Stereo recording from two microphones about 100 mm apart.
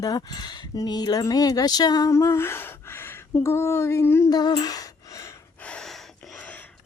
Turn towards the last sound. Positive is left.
turn(degrees=10)  # may be behind; listen again after turning